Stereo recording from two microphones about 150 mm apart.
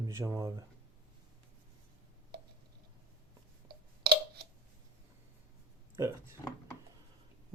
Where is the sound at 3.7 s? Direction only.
90° right.